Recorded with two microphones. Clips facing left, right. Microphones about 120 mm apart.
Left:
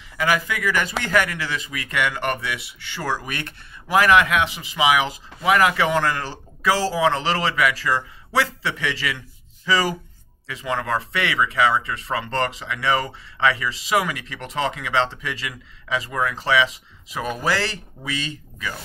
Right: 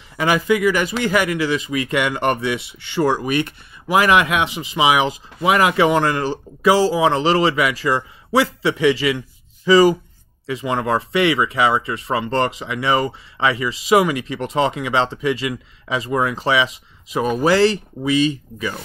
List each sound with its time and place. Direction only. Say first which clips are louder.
0.2 s speech: right 6 dB; 20° right (ahead or behind)